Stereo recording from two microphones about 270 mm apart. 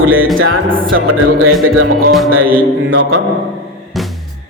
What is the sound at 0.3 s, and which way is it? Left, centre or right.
Speech, right.